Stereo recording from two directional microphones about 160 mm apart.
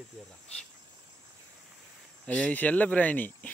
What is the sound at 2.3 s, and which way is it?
Speech, 10° left (ahead or behind).